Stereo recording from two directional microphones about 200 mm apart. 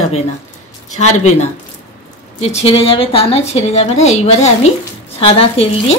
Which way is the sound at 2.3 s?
35° left (ahead or behind).